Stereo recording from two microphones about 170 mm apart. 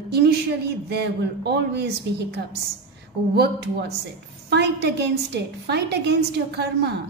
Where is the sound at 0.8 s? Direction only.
75° right (ahead or behind).